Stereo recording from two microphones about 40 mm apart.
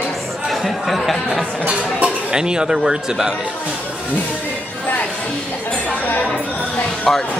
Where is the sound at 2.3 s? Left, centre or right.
Right.